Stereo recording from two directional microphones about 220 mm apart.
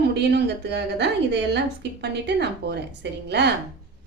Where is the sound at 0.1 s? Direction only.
50° right (ahead or behind).